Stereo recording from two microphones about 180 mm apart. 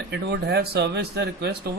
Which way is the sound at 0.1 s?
65° right (ahead or behind).